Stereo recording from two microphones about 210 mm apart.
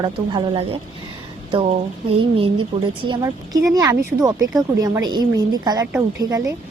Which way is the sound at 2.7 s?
25° right (ahead or behind).